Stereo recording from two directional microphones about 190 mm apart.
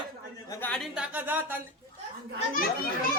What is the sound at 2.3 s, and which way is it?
Children playing, 45° left (ahead or behind).